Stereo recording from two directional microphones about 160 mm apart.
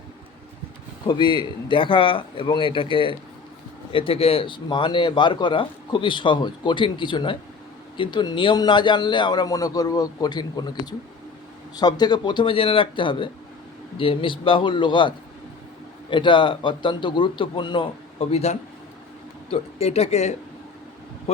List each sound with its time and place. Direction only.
1.0 s a man's voice: 30° left (ahead or behind)